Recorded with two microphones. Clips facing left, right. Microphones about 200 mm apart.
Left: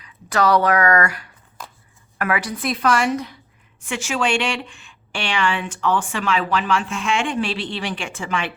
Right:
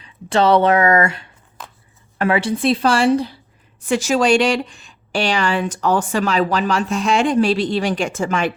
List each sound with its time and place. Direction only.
0.0 s a woman's voice: 25° right (ahead or behind); by 8.5 s 45° right (ahead or behind)